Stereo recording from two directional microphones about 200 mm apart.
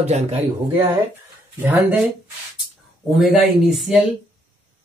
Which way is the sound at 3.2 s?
Centre (ahead or behind).